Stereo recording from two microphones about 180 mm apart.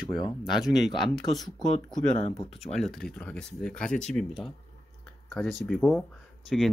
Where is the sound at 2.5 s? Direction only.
Centre (ahead or behind).